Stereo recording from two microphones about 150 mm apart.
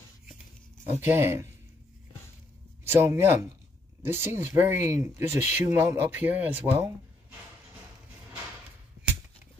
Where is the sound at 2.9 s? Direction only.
15° right (ahead or behind).